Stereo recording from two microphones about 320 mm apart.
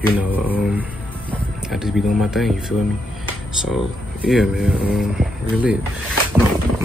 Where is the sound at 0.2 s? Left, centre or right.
Centre.